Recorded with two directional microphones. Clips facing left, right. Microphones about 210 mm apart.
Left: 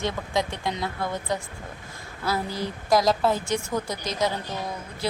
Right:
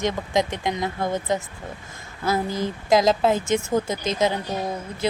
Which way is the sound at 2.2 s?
45° right (ahead or behind).